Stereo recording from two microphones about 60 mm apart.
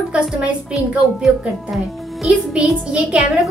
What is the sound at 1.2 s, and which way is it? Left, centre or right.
Speech, centre.